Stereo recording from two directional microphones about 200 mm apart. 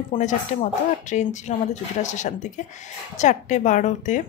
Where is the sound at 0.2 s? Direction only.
40° left (ahead or behind).